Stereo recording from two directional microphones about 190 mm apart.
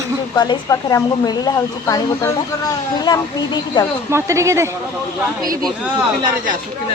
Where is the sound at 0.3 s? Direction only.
20° left (ahead or behind).